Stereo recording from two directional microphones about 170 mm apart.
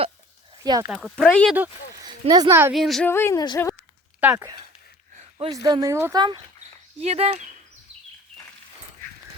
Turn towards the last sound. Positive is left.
turn(degrees=-40)  # may be behind; listen again after turning